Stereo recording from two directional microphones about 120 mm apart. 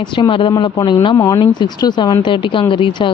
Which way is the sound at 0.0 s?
45° left (ahead or behind).